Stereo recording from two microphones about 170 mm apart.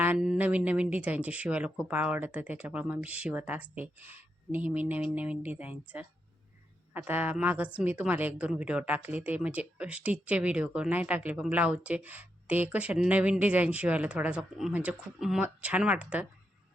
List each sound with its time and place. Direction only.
0.0 s a woman's voice: 5° right (ahead or behind)